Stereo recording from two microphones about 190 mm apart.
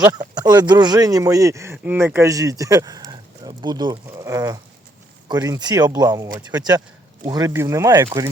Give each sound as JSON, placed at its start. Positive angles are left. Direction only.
{"t": 0.0, "sound": "speech", "side_deg": -20}
{"t": 7.3, "sound": "speech", "side_deg": -20}